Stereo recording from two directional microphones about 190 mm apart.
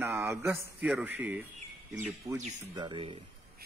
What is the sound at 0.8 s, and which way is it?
A man's voice, 5° right (ahead or behind).